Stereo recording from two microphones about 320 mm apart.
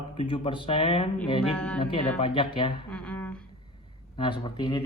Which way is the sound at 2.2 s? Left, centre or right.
Centre.